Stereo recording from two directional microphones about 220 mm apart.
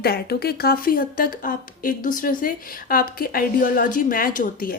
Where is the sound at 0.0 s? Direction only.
45° left (ahead or behind).